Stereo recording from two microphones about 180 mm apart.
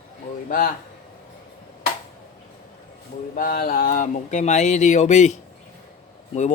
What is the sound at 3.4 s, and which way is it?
Speech, 55° left (ahead or behind).